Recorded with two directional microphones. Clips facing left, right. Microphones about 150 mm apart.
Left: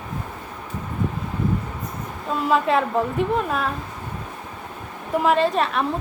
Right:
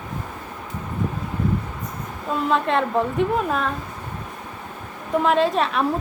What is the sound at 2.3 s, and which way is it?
A woman's voice, 5° left (ahead or behind).